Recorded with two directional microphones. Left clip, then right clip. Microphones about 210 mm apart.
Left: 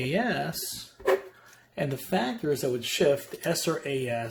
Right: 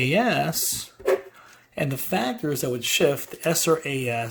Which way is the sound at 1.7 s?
35° right (ahead or behind).